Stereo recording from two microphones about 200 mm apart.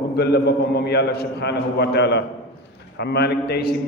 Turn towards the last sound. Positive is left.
turn(degrees=55)  # may be behind; listen again after turning